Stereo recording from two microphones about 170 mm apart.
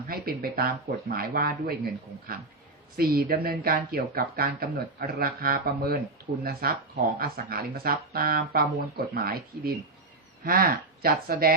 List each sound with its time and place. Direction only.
0.1 s speech: 60° right (ahead or behind)